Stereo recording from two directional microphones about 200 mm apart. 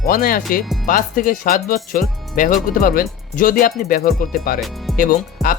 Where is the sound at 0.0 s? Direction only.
45° left (ahead or behind).